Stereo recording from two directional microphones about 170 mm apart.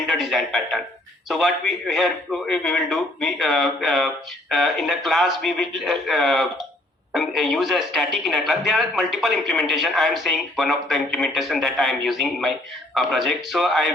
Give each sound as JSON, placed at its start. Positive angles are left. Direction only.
{"t": 0.1, "sound": "speech", "side_deg": 0}